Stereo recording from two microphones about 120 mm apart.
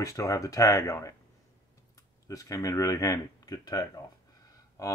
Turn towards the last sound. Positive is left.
turn(degrees=30)  # may be behind; listen again after turning